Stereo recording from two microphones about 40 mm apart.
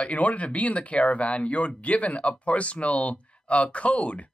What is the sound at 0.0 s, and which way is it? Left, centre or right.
Speech, left.